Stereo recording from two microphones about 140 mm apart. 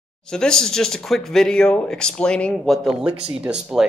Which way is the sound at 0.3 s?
5° left (ahead or behind).